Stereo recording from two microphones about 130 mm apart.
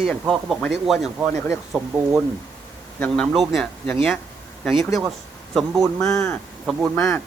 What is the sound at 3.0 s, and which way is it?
Speech, 5° left (ahead or behind).